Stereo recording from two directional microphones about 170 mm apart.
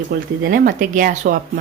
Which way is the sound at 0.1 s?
55° right (ahead or behind).